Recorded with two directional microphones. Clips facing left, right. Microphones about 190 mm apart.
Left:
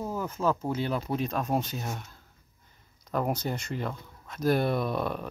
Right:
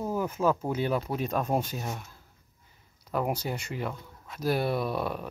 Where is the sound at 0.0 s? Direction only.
10° right (ahead or behind).